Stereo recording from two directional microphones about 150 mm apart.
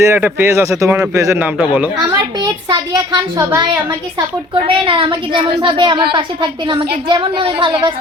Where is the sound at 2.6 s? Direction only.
30° right (ahead or behind).